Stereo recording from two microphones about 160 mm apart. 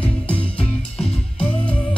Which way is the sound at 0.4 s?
35° left (ahead or behind).